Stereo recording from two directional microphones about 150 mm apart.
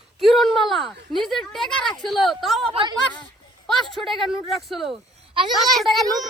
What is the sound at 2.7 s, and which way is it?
Speech, 30° right (ahead or behind).